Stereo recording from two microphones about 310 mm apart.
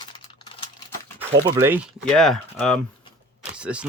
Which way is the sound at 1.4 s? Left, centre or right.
Centre.